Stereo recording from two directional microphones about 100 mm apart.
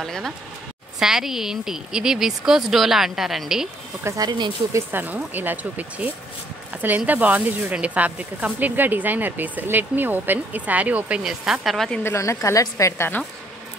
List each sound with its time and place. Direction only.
0.0 s a woman's voice: centre (ahead or behind)
4.0 s speech: 30° right (ahead or behind)
4.7 s speech: 20° right (ahead or behind)
11.2 s a woman's voice: 5° right (ahead or behind)
12.0 s a woman's voice: 25° left (ahead or behind)